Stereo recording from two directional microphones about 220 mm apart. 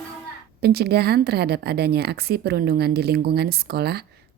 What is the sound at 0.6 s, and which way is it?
A woman's voice, 45° right (ahead or behind).